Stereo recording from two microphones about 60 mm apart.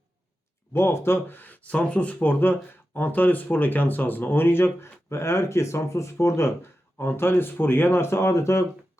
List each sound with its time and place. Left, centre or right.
0.7 s speech: left
2.4 s speech: left